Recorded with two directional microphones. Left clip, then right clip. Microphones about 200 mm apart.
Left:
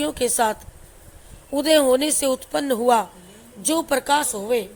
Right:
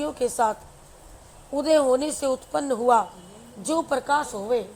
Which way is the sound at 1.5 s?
15° left (ahead or behind).